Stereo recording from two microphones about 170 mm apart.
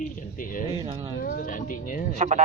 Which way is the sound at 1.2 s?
55° left (ahead or behind).